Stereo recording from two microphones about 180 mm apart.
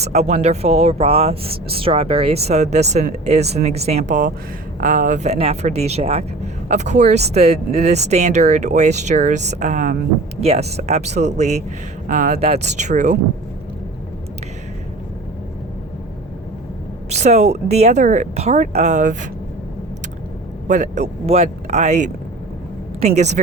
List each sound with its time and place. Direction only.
0.0 s speech: 35° right (ahead or behind)
17.1 s speech: 40° right (ahead or behind)
20.7 s a woman's voice: 40° right (ahead or behind)